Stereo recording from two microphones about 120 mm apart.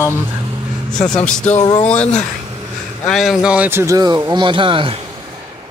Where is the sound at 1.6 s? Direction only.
55° left (ahead or behind).